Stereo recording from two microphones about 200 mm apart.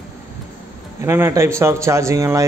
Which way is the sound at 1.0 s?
10° right (ahead or behind).